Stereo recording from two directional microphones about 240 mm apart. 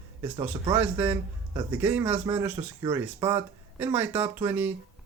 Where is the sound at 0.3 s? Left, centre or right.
Centre.